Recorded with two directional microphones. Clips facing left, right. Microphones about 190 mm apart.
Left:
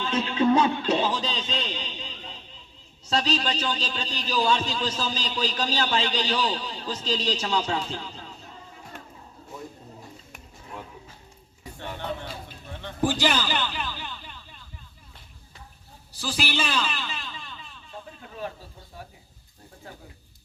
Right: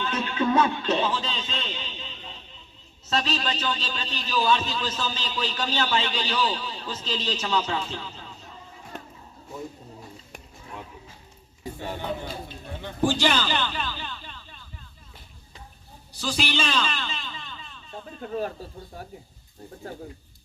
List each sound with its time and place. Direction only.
0.0 s a man's voice: 25° left (ahead or behind)
13.0 s a man's voice: 10° left (ahead or behind)
16.2 s a man's voice: 5° left (ahead or behind)
18.9 s speech: 50° right (ahead or behind)